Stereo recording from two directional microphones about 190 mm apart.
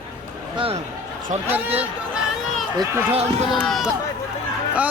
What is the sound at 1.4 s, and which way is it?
Speech, 10° right (ahead or behind).